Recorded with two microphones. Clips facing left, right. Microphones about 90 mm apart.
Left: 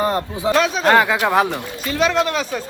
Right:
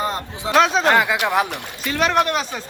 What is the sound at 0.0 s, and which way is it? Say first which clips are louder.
Speech: left 5 dB; 20° left (ahead or behind).